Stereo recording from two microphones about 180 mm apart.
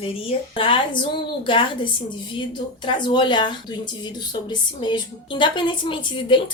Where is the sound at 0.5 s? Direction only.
30° left (ahead or behind).